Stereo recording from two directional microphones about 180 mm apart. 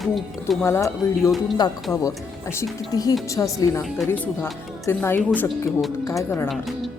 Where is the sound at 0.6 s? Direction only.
15° left (ahead or behind).